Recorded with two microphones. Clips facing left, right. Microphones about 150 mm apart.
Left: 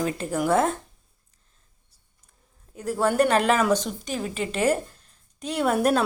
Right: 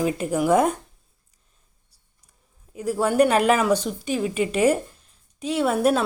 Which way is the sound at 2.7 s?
10° right (ahead or behind).